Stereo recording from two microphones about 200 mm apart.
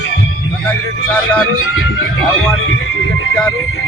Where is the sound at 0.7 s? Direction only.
10° left (ahead or behind).